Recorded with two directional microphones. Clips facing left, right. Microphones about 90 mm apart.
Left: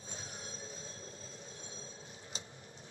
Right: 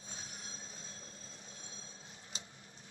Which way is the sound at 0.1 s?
35° left (ahead or behind).